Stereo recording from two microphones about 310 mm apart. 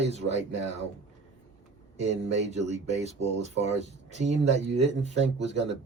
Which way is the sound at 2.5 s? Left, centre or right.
Right.